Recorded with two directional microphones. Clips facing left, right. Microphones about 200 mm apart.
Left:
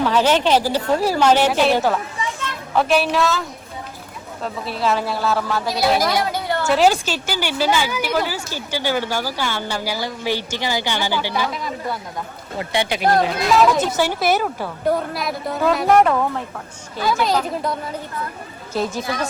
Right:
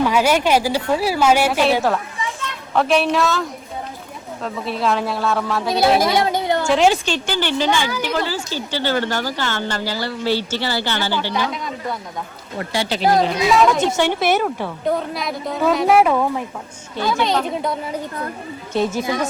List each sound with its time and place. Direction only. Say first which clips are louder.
0.0 s a woman's voice: even; 10° right (ahead or behind)
4.4 s speech: right 1 dB; centre (ahead or behind)
6.1 s a sound: right 3 dB; 25° right (ahead or behind)
6.7 s a woman's voice: left 1 dB; 5° left (ahead or behind)
12.5 s speech: even; 20° left (ahead or behind)
13.1 s speech: even; centre (ahead or behind)